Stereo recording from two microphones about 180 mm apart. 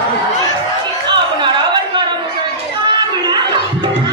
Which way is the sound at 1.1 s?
25° right (ahead or behind).